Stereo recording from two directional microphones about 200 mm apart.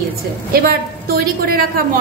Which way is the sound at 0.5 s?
50° right (ahead or behind).